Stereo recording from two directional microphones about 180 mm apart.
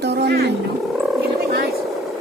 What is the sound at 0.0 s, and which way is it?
Wild animals, 70° right (ahead or behind).